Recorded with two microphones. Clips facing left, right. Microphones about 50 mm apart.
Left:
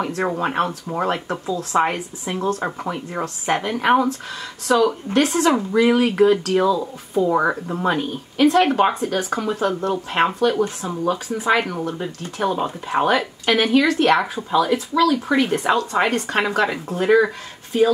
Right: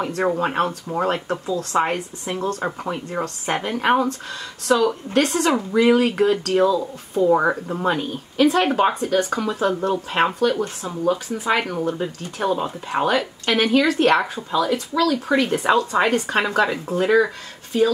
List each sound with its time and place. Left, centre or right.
0.0 s speech: centre
7.2 s speech: centre
13.0 s speech: centre
13.5 s speech: centre